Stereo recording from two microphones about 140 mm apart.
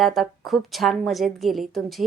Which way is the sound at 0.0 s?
Centre (ahead or behind).